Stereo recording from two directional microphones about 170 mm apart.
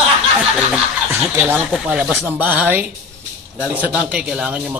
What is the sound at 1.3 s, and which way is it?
A man's voice, 10° right (ahead or behind).